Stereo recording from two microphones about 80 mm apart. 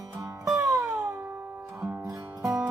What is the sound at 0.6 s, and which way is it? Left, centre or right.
Music, right.